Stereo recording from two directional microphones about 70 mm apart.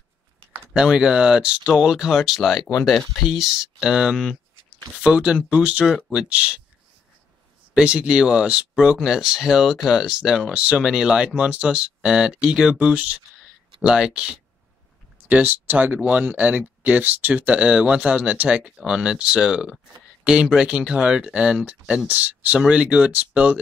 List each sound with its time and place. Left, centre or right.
0.7 s speech: centre
7.7 s speech: centre
15.2 s speech: right